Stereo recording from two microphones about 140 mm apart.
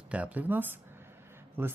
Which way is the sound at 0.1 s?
10° right (ahead or behind).